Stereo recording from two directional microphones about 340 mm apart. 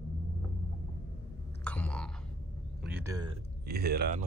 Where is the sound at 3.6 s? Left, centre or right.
Right.